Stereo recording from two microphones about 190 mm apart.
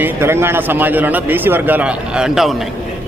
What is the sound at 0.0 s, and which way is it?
A man's voice, 10° right (ahead or behind).